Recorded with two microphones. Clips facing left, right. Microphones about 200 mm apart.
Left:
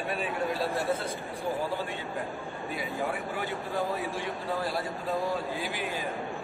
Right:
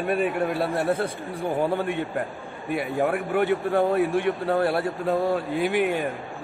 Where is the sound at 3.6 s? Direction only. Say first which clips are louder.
Right 10 dB; 70° right (ahead or behind).